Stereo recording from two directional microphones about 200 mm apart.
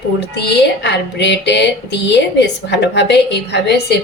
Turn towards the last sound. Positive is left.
turn(degrees=55)  # may be behind; listen again after turning